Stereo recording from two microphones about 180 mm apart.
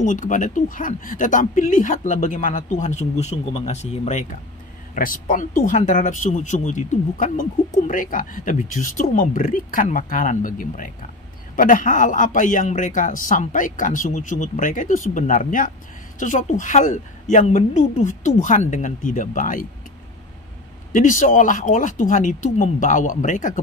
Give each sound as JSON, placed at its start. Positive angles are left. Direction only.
{"t": 0.0, "sound": "speech", "side_deg": 45}
{"t": 20.9, "sound": "speech", "side_deg": 45}